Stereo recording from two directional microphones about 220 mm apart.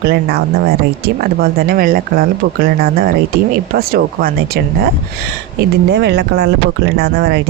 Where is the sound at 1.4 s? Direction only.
45° right (ahead or behind).